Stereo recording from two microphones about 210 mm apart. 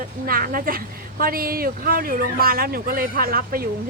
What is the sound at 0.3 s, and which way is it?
Speech, 45° right (ahead or behind).